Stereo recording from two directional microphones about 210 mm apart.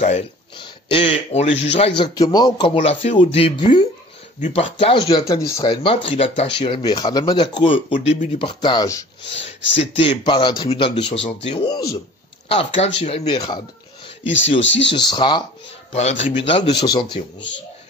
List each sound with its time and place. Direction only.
0.0 s speech: 30° left (ahead or behind)
9.6 s speech: 60° left (ahead or behind)
9.9 s speech: 25° left (ahead or behind)
12.4 s speech: 30° left (ahead or behind)
14.2 s speech: 60° left (ahead or behind)
14.9 s speech: 20° left (ahead or behind)